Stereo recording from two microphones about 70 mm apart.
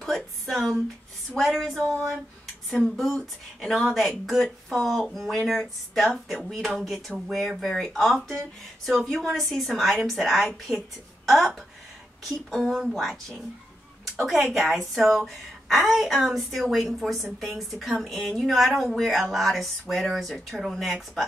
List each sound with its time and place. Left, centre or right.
0.0 s speech: centre
3.7 s a woman's voice: centre